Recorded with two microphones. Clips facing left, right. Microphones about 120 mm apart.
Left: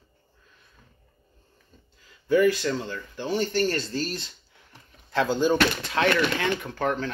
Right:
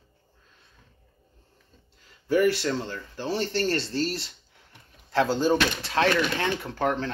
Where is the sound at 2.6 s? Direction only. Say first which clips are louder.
Even; 35° right (ahead or behind).